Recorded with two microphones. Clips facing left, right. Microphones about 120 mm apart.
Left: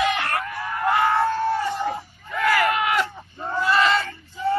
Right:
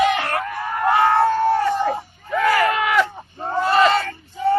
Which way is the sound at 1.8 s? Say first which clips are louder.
Right 4 dB; 40° right (ahead or behind).